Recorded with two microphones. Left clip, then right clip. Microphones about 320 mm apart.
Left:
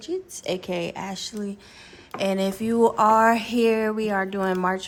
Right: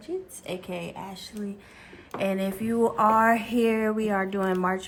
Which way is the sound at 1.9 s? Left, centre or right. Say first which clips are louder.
Left 3 dB; centre.